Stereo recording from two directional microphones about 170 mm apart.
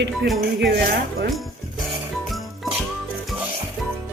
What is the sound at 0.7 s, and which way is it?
Speech, 75° right (ahead or behind).